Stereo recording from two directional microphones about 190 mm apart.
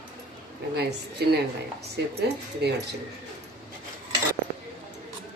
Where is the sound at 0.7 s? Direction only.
60° right (ahead or behind).